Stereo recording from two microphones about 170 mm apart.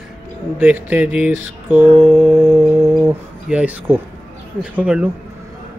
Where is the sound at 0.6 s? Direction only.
10° right (ahead or behind).